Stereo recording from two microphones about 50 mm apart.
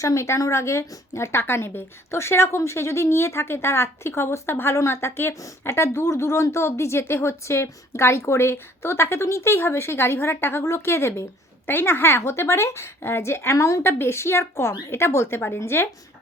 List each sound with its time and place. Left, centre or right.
0.0 s a woman's voice: left
5.7 s a woman's voice: left
9.2 s a woman's voice: left
11.6 s a woman's voice: left
13.0 s a woman's voice: left
14.0 s a woman's voice: left